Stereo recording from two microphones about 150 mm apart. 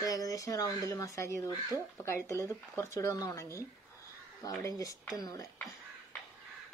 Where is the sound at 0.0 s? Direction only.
25° left (ahead or behind).